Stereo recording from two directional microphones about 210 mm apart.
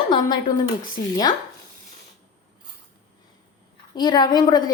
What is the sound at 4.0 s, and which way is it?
Speech, 20° left (ahead or behind).